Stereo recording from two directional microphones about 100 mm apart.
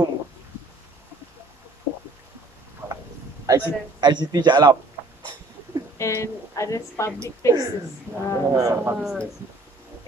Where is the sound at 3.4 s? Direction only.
45° right (ahead or behind).